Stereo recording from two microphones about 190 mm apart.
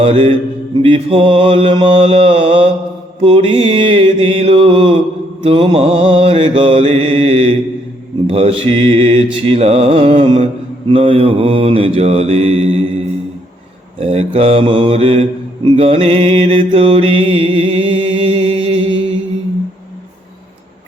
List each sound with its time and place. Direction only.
0.0 s mantra: 30° right (ahead or behind)
14.0 s mantra: 30° right (ahead or behind)